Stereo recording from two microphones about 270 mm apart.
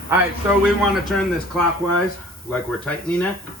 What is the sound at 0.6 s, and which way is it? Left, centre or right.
Speech, centre.